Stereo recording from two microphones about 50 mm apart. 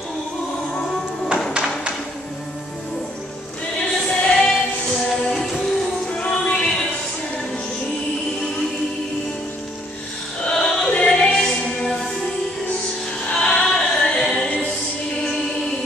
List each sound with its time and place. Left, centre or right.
0.7 s music: centre
3.7 s music: centre
6.6 s a sound: centre
10.5 s music: centre
10.9 s music: left
13.3 s music: centre